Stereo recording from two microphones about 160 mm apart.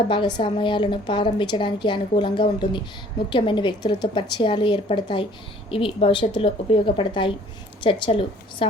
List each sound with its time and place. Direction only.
0.1 s a woman's voice: 30° left (ahead or behind)